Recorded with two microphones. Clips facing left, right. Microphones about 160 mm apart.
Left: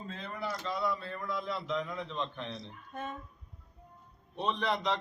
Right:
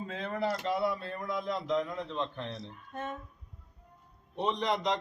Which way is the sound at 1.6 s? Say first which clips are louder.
Right 4 dB; 10° right (ahead or behind).